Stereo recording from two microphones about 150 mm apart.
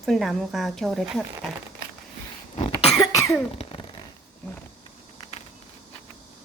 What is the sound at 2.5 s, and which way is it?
Cough, 40° left (ahead or behind).